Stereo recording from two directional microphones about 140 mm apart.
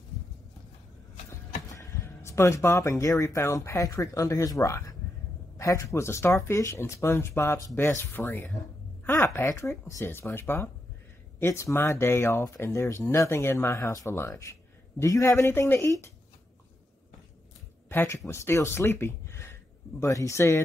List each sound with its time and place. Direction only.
1.7 s speech: 25° left (ahead or behind)
17.8 s speech: 20° left (ahead or behind)